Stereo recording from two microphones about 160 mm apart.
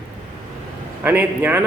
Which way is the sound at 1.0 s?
10° right (ahead or behind).